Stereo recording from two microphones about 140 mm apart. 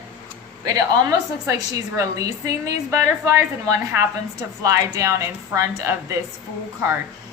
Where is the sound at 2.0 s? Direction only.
25° right (ahead or behind).